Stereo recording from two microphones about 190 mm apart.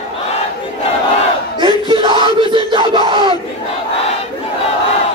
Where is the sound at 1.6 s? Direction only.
25° right (ahead or behind).